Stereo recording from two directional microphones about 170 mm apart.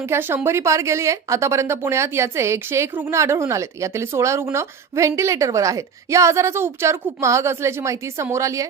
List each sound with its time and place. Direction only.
0.1 s speech: 10° right (ahead or behind)